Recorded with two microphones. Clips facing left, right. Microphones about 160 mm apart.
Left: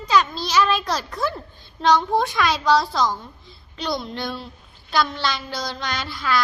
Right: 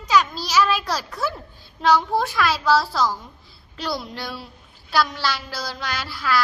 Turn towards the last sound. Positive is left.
turn(degrees=-5)  # may be behind; listen again after turning